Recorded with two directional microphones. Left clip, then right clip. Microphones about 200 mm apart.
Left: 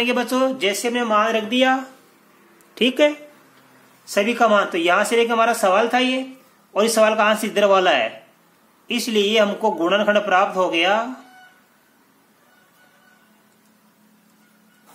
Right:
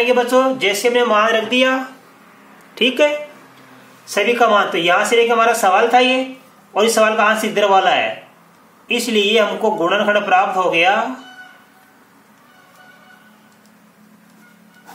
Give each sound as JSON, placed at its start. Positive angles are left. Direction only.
{"t": 0.0, "sound": "a man's voice", "side_deg": 40}